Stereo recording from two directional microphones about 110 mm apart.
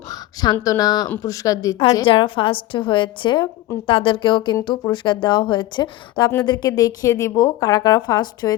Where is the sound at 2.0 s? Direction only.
50° left (ahead or behind).